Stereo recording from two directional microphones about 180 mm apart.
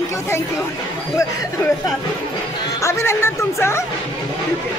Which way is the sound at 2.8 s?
15° left (ahead or behind).